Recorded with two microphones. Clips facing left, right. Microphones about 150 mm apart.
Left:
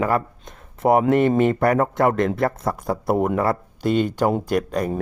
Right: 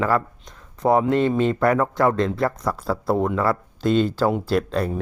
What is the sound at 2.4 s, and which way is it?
Speech, 20° left (ahead or behind).